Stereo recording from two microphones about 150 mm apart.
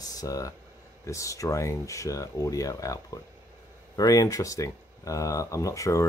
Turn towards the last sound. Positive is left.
turn(degrees=20)  # may be behind; listen again after turning